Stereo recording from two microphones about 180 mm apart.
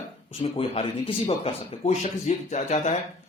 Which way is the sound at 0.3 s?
30° left (ahead or behind).